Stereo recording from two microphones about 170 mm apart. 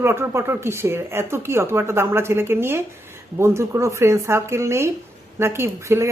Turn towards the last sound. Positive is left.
turn(degrees=-15)  # may be behind; listen again after turning